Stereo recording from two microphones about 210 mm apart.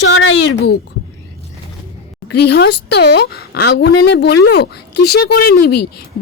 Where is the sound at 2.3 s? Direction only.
50° left (ahead or behind).